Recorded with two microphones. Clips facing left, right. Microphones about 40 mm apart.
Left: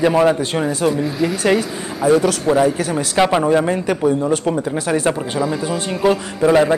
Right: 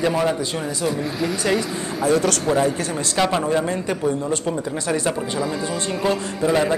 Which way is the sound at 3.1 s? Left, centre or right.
Left.